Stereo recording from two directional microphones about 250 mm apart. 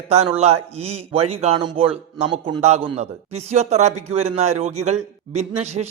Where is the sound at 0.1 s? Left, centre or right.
Right.